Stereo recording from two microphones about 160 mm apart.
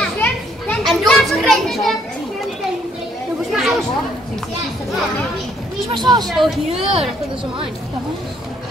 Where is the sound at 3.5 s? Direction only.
Centre (ahead or behind).